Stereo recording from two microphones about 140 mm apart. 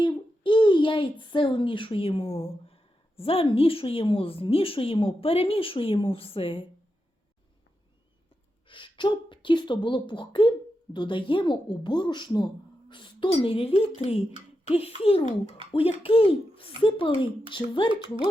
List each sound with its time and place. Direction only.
0.0 s child singing: 35° left (ahead or behind)
1.2 s a woman's voice: 35° left (ahead or behind)
8.6 s a woman's voice: 35° left (ahead or behind)